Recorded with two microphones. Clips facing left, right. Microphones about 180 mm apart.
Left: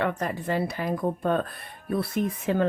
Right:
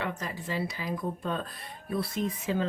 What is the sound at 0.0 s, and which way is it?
Speech, 55° left (ahead or behind).